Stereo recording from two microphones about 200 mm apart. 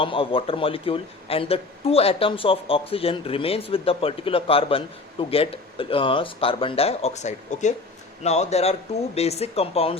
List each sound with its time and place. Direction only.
0.0 s a man's voice: 25° left (ahead or behind)